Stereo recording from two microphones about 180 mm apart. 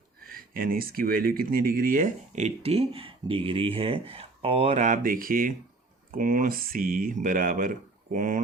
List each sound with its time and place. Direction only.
0.2 s speech: 55° right (ahead or behind)